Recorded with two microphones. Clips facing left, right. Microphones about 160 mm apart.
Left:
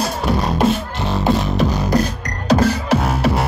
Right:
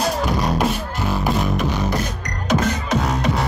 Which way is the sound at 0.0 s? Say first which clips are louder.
Left 1 dB; 25° left (ahead or behind).